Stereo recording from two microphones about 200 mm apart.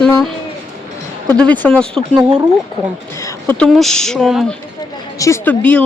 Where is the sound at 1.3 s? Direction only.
10° left (ahead or behind).